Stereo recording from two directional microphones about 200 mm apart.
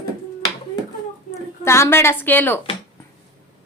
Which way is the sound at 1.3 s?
15° left (ahead or behind).